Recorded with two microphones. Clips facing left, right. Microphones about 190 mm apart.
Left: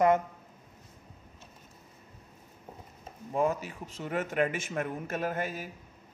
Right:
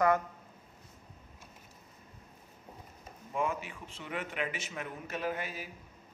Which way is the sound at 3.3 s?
40° left (ahead or behind).